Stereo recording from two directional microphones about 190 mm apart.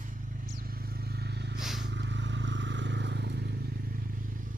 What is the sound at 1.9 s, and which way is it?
Vehicle, 70° right (ahead or behind).